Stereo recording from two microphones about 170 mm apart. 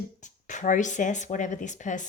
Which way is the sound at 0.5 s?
45° left (ahead or behind).